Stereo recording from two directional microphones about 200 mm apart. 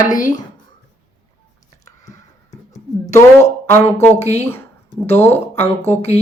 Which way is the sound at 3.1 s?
10° left (ahead or behind).